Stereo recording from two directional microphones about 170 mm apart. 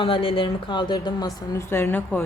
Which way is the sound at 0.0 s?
30° left (ahead or behind).